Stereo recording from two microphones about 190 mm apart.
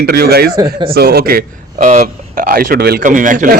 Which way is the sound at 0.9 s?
55° right (ahead or behind).